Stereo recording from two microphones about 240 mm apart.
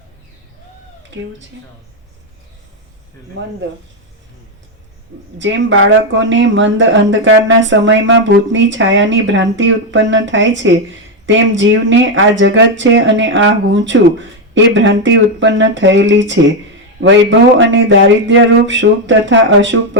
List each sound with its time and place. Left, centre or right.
3.4 s speech: right
5.4 s speech: right